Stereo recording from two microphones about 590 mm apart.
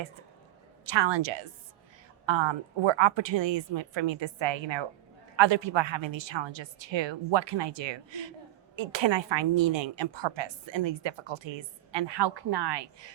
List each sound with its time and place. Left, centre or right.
0.9 s a woman's voice: right